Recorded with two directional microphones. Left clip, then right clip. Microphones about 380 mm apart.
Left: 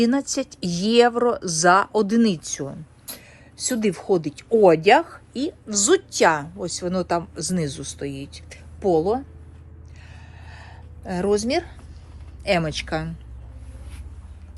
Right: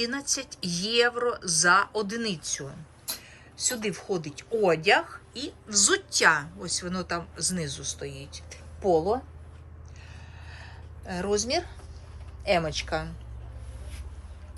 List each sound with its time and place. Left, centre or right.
0.0 s speech: centre
10.4 s a sound: centre
12.4 s speech: left